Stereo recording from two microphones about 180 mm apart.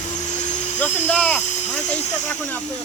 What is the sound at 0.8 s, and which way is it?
Speech, 5° left (ahead or behind).